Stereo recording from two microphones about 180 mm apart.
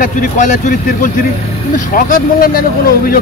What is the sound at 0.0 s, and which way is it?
Speech, 45° left (ahead or behind).